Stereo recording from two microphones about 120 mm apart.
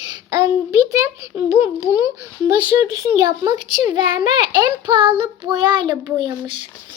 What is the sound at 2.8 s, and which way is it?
Child singing, 35° right (ahead or behind).